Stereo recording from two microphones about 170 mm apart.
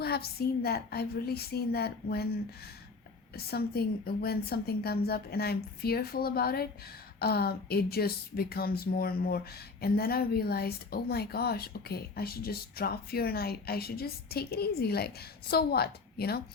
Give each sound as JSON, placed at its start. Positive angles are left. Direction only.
{"t": 0.0, "sound": "a woman's voice", "side_deg": 65}